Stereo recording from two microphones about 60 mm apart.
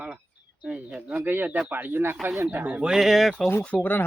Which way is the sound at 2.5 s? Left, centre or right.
Right.